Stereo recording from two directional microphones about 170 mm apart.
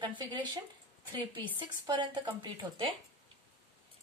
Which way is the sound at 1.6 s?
30° right (ahead or behind).